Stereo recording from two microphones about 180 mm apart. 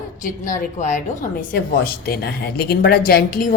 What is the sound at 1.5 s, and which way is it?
Speech, 60° left (ahead or behind).